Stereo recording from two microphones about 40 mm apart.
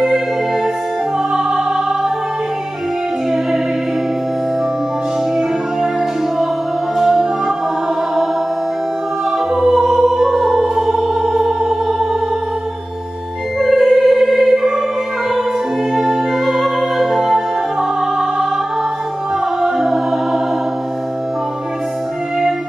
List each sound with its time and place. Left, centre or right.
1.3 s music: centre
7.0 s music: centre
9.5 s music: centre
11.6 s music: right
13.6 s music: centre
15.9 s music: centre
19.6 s music: centre